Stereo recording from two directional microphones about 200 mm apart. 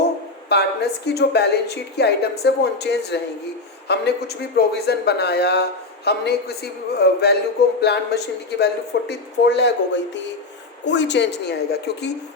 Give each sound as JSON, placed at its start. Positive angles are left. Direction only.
{"t": 0.4, "sound": "a woman's voice", "side_deg": 55}